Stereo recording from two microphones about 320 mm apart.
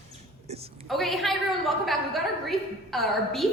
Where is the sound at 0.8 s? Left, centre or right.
Centre.